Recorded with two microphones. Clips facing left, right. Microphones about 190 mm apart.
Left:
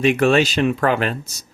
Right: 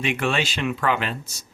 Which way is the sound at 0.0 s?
40° left (ahead or behind).